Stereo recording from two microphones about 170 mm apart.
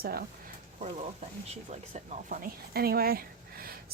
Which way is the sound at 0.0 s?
60° right (ahead or behind).